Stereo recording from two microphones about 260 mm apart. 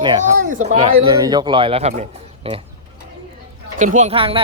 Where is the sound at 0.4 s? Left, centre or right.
Right.